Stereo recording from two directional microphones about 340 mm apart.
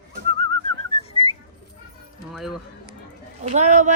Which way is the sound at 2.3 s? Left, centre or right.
Centre.